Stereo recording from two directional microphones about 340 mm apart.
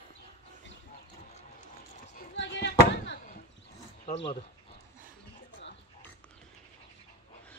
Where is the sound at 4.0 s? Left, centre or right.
Centre.